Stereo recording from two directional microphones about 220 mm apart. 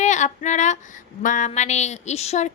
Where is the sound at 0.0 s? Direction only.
35° left (ahead or behind).